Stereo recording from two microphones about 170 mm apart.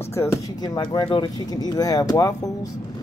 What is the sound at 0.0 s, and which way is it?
Speech, 15° left (ahead or behind).